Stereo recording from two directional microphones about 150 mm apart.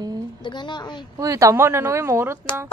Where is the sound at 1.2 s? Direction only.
20° right (ahead or behind).